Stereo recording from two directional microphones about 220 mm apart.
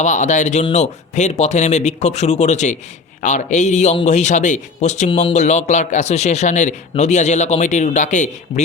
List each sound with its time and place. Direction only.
0.0 s a man's voice: 35° left (ahead or behind)